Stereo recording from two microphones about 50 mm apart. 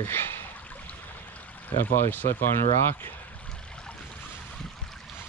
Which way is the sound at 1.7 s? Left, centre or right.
Left.